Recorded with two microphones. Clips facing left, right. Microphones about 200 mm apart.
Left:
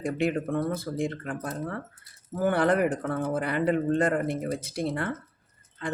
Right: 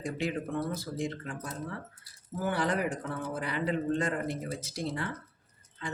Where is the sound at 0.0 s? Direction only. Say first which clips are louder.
Left 6 dB; 55° left (ahead or behind).